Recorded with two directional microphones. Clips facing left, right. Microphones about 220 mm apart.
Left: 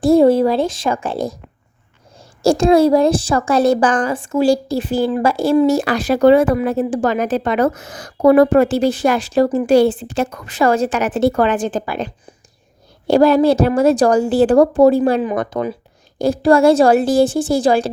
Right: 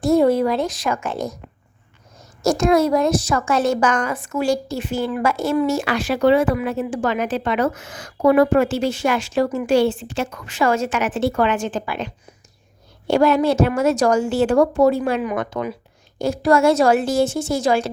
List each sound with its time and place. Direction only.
0.0 s a woman's voice: 30° left (ahead or behind)